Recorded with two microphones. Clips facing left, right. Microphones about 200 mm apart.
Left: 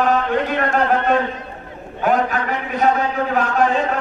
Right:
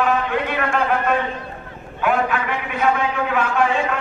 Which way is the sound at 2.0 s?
40° left (ahead or behind).